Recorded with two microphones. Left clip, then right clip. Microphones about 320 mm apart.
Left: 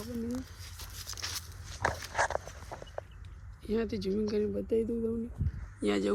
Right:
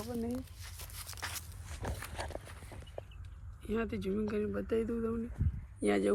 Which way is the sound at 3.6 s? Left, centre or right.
Centre.